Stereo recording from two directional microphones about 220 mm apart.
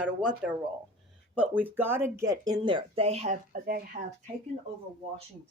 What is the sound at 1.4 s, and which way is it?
Speech, 10° right (ahead or behind).